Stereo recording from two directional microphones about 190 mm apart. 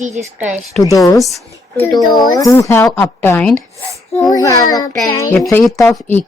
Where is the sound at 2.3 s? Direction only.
15° left (ahead or behind).